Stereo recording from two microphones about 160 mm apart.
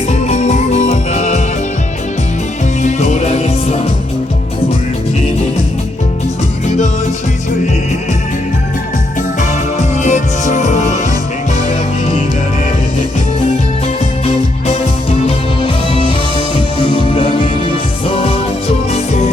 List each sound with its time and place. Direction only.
0.1 s music: 45° left (ahead or behind)
2.8 s music: 45° left (ahead or behind)
9.4 s music: 50° left (ahead or behind)
14.3 s music: 40° left (ahead or behind)